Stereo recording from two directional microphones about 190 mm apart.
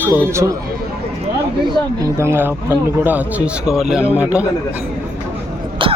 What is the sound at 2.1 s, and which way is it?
Speech, 15° right (ahead or behind).